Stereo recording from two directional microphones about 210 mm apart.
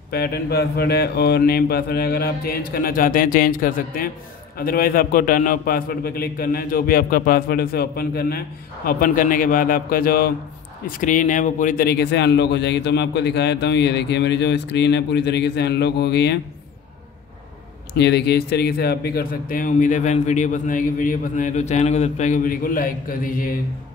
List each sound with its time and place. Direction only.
0.1 s a man's voice: 50° left (ahead or behind)
17.9 s a man's voice: 55° left (ahead or behind)